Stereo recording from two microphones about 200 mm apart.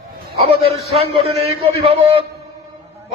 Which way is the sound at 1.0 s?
30° right (ahead or behind).